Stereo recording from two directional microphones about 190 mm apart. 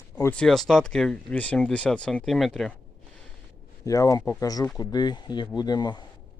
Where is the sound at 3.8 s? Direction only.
15° left (ahead or behind).